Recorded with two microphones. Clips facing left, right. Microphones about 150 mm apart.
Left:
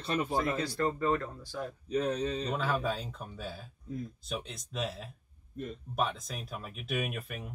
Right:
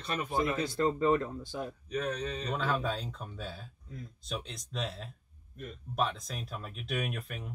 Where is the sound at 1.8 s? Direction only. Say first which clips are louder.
Left 5 dB; 30° left (ahead or behind).